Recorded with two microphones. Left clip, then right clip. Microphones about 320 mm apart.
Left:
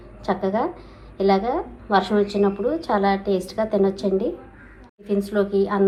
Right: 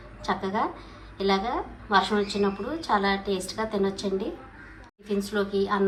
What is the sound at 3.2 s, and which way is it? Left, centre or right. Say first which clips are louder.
Speech: left 6 dB; centre.